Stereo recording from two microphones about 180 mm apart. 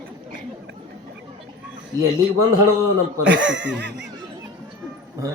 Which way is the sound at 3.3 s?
85° right.